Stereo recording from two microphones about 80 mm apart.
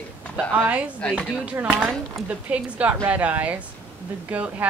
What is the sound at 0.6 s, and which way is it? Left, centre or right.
A woman's voice, centre.